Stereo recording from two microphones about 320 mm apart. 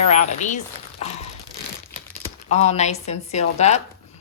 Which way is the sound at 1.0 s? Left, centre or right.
Centre.